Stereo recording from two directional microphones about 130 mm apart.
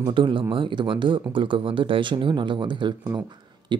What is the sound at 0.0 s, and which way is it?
Speech, 40° right (ahead or behind).